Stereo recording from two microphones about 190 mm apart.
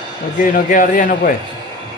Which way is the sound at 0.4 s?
45° left (ahead or behind).